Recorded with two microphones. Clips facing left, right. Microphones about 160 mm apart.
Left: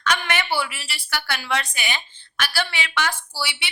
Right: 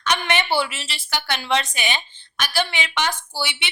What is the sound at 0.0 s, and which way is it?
A woman's voice, 20° right (ahead or behind).